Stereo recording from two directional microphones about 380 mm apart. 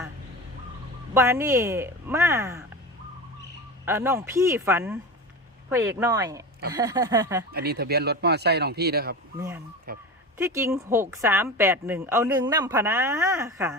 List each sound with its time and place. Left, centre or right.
1.1 s a woman's voice: centre
3.8 s a woman's voice: centre
7.5 s speech: right
10.3 s a woman's voice: centre